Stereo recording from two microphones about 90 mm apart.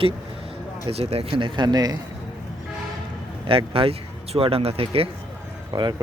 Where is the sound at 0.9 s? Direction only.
90° right; by 2.0 s 45° right (ahead or behind).